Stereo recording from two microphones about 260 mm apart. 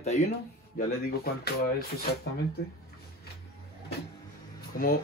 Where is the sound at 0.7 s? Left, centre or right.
Left.